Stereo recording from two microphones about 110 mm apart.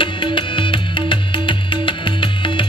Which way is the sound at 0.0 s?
50° left (ahead or behind).